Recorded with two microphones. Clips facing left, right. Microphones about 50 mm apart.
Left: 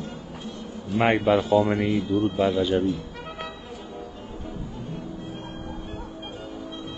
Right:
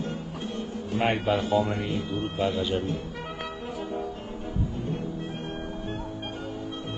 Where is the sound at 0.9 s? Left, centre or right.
Left.